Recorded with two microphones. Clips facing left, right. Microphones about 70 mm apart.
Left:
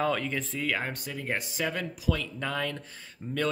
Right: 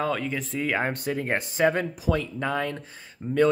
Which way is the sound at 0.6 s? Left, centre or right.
Right.